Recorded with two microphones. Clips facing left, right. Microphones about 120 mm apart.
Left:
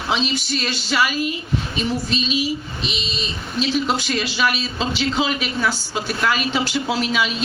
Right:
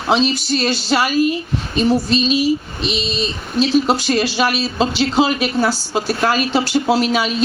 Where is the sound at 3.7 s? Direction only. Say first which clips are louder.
Right 6 dB; 40° right (ahead or behind).